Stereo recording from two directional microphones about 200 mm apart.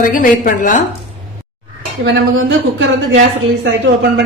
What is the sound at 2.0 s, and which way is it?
Dishes, 70° right (ahead or behind).